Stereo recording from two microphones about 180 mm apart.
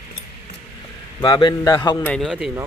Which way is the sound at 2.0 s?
Centre (ahead or behind).